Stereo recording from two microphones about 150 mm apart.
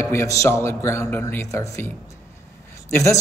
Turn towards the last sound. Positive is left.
turn(degrees=20)  # may be behind; listen again after turning